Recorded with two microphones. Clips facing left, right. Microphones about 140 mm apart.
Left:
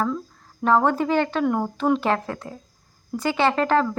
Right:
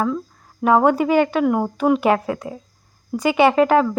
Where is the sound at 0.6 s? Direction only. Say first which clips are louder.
Right 4 dB; 10° right (ahead or behind).